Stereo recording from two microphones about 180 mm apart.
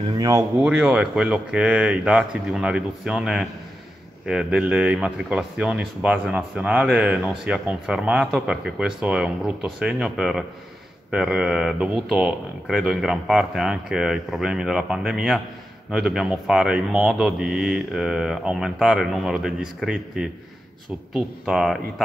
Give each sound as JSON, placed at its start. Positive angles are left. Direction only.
{"t": 0.0, "sound": "speech", "side_deg": -25}
{"t": 0.6, "sound": "speech", "side_deg": -5}